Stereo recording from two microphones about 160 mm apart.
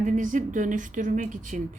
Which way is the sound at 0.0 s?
55° right (ahead or behind).